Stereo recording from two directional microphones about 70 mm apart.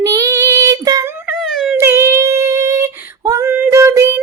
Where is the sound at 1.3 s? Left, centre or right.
Centre.